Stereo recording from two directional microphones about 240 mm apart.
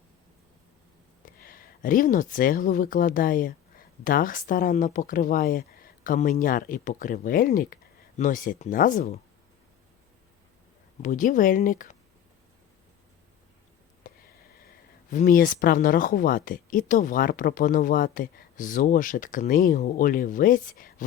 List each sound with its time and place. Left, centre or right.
1.2 s speech: left
11.0 s speech: left
14.0 s sniff: left
15.1 s speech: left